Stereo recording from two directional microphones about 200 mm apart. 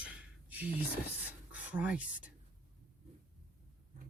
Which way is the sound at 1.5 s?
5° right (ahead or behind).